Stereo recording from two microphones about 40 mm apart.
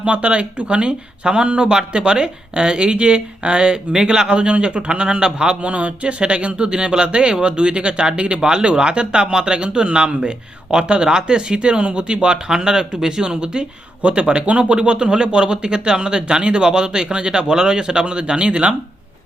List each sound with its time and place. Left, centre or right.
0.0 s speech: right
5.6 s speech: right